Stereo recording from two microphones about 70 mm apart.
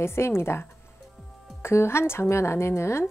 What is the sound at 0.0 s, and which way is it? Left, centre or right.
A woman's voice, left.